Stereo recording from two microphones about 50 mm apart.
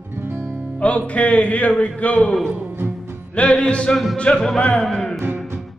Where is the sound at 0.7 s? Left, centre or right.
Left.